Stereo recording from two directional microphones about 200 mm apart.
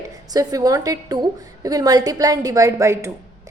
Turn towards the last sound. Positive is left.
turn(degrees=-15)  # may be behind; listen again after turning